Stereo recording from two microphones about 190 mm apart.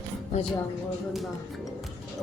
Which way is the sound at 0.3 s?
40° left (ahead or behind).